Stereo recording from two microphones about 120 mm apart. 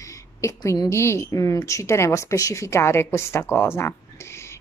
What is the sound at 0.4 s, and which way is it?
A woman's voice, 25° left (ahead or behind).